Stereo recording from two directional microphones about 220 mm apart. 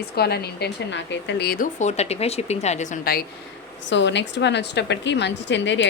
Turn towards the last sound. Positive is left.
turn(degrees=55)  # may be behind; listen again after turning